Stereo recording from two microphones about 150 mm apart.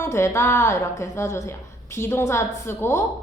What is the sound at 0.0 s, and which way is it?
A woman's voice, 20° left (ahead or behind).